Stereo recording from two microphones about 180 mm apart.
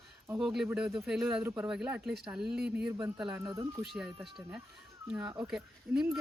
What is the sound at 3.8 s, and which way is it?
Speech, centre (ahead or behind).